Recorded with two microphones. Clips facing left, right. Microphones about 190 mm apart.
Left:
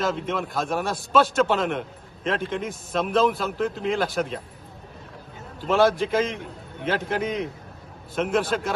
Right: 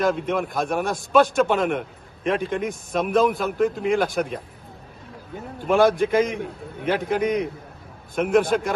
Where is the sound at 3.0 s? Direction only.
15° right (ahead or behind).